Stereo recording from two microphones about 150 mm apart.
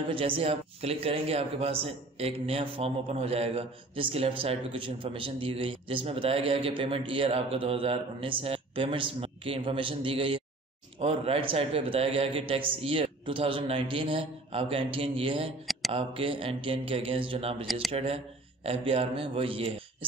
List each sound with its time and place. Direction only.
0.1 s speech: 35° right (ahead or behind)
15.6 s a sound: centre (ahead or behind)
15.9 s speech: 35° right (ahead or behind)